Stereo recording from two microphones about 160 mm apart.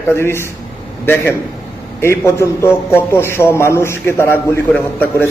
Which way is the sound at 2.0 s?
15° left (ahead or behind).